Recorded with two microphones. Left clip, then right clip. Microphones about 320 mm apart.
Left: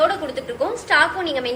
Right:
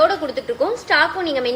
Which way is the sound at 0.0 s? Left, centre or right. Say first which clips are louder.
Right 3 dB; right.